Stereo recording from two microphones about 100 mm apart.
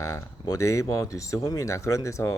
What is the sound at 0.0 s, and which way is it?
Speech, 30° left (ahead or behind).